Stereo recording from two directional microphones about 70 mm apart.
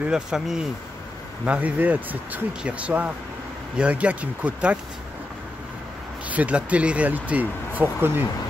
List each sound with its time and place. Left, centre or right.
0.1 s speech: centre
1.4 s speech: right
6.2 s speech: right